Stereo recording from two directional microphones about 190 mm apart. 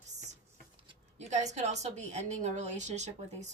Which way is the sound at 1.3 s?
35° right (ahead or behind).